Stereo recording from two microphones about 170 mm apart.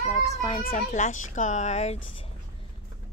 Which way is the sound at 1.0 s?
45° left (ahead or behind).